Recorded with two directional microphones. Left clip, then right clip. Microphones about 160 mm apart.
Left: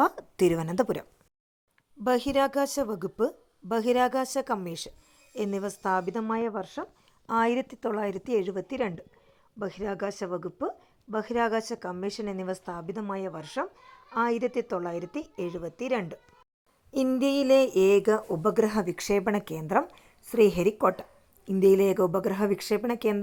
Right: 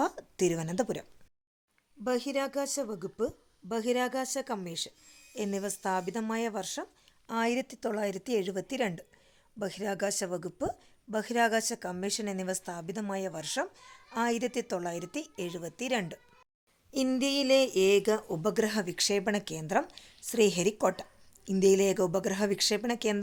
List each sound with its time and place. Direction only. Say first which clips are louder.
0.0 s a woman's voice: left 6 dB; 10° left (ahead or behind)
2.0 s a woman's voice: left 6 dB; 25° left (ahead or behind); by 16.2 s centre (ahead or behind)
17.2 s a woman's voice: left 4 dB; 15° left (ahead or behind)